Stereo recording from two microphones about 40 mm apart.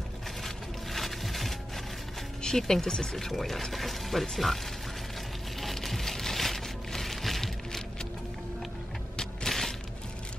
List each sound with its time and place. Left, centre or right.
0.9 s music: centre
2.4 s speech: centre
5.6 s a sound: centre
9.1 s music: centre
9.5 s crushing: centre